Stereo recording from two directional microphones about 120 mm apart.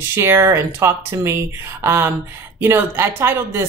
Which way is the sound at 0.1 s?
20° right (ahead or behind).